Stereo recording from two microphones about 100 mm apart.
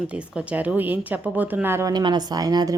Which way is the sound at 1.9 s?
45° right (ahead or behind).